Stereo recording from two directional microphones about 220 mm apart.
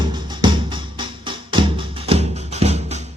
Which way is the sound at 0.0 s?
20° right (ahead or behind).